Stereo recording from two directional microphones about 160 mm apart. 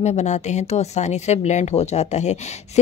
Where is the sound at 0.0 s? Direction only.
45° left (ahead or behind).